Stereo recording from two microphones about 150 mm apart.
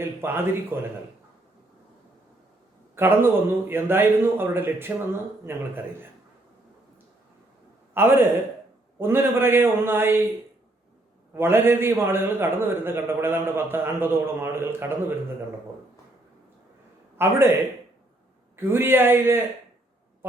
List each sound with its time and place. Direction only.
0.0 s a man's voice: 15° right (ahead or behind)
2.9 s a man's voice: 15° right (ahead or behind)
7.9 s a man's voice: 15° right (ahead or behind)
11.3 s a man's voice: 15° right (ahead or behind)
17.2 s a man's voice: 15° right (ahead or behind)